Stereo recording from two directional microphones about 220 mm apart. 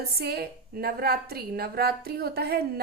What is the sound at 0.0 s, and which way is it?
A woman's voice, 45° right (ahead or behind).